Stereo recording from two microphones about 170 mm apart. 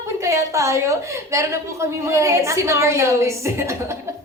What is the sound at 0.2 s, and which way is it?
A woman's voice, 20° right (ahead or behind).